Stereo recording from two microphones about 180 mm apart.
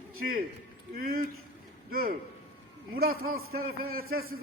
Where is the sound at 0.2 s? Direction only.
55° right (ahead or behind).